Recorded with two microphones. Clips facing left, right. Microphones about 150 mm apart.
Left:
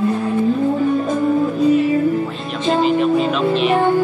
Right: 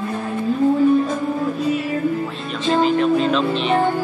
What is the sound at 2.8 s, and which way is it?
Music, 5° left (ahead or behind).